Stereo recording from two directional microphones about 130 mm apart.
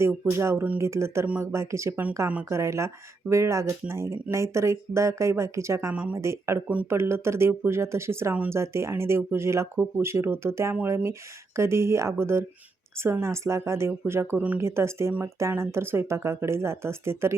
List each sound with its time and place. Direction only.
0.0 s speech: 20° right (ahead or behind)
5.9 s speech: 10° right (ahead or behind)